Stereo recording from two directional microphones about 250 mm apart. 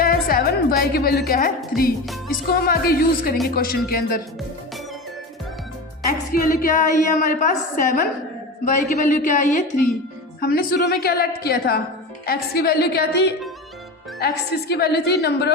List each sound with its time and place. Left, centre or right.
0.0 s a woman's voice: left
6.3 s a woman's voice: left